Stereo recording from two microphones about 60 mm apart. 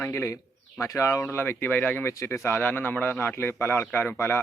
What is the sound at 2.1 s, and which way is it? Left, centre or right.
A man's voice, left.